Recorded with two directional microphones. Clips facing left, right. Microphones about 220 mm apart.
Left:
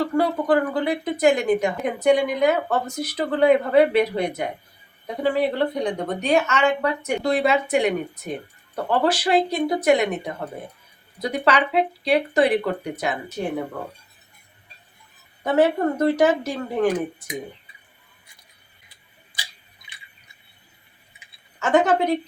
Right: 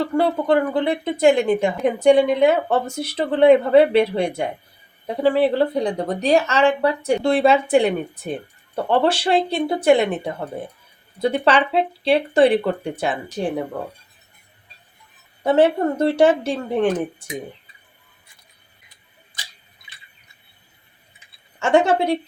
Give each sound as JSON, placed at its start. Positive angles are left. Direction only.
{"t": 0.2, "sound": "a woman's voice", "side_deg": -25}
{"t": 15.4, "sound": "a woman's voice", "side_deg": -30}
{"t": 21.6, "sound": "a woman's voice", "side_deg": -30}